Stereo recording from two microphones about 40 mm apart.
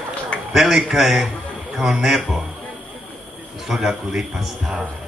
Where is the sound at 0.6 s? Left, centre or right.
Centre.